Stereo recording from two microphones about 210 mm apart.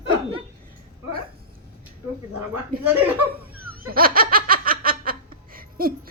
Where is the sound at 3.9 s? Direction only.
45° right (ahead or behind).